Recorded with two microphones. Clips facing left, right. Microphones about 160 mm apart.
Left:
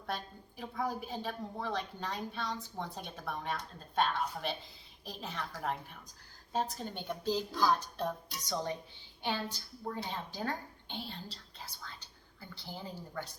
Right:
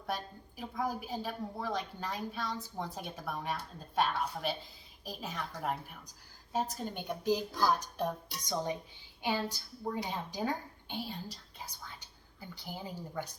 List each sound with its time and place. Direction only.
0.1 s a woman's voice: 10° right (ahead or behind)